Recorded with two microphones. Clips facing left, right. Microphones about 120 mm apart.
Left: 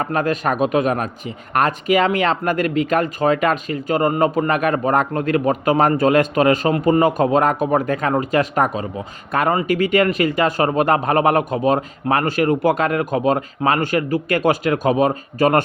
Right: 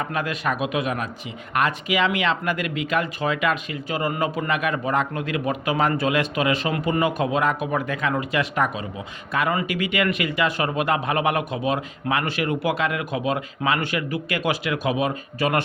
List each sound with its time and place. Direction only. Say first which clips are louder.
0.0 s a man's voice: left 6 dB; 45° left (ahead or behind)